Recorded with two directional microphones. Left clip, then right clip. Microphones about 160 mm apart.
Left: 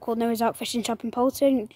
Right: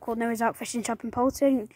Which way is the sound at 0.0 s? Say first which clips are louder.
Left 2 dB; 10° left (ahead or behind).